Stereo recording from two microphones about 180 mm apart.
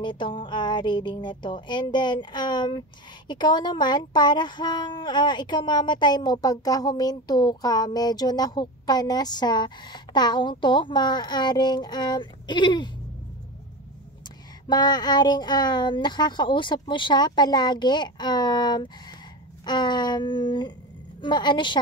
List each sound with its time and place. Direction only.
0.0 s speech: 25° left (ahead or behind)
14.7 s speech: 25° left (ahead or behind)